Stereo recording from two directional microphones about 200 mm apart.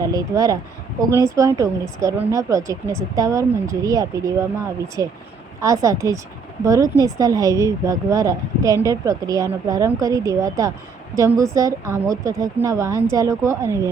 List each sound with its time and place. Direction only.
0.0 s speech: 15° right (ahead or behind)